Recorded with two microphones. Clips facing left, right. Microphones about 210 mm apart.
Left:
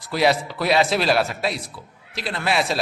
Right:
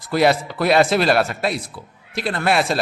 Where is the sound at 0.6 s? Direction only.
55° right (ahead or behind).